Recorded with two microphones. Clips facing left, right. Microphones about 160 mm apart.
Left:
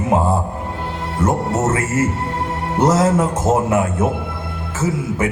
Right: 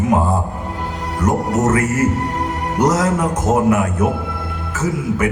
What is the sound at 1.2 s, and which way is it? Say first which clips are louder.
Speech: right 1 dB; 25° left (ahead or behind).